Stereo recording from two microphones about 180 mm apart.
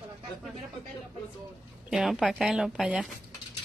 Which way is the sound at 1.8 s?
5° right (ahead or behind).